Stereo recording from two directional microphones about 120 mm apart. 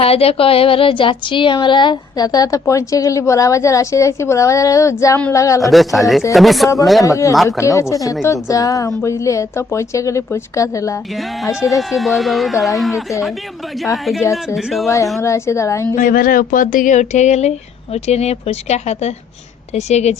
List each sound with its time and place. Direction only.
0.0 s speech: 55° left (ahead or behind); by 5.7 s 25° left (ahead or behind)
5.7 s speech: centre (ahead or behind)
7.0 s speech: 25° left (ahead or behind)
11.8 s speech: centre (ahead or behind)
15.2 s speech: 25° left (ahead or behind)
16.0 s speech: 90° left; by 17.5 s 75° left (ahead or behind)
17.9 s a woman's voice: 65° left (ahead or behind)